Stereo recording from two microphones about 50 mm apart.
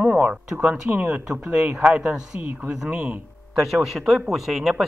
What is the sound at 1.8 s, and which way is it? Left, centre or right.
Speech, right.